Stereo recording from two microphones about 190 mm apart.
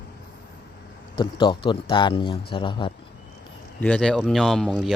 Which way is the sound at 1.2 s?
25° left (ahead or behind).